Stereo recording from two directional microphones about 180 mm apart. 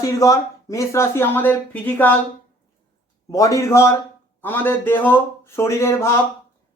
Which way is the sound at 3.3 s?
20° left (ahead or behind).